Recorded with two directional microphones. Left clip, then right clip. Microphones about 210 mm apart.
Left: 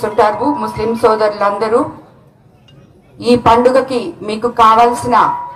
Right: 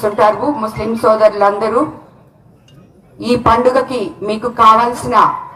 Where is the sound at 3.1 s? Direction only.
50° left (ahead or behind).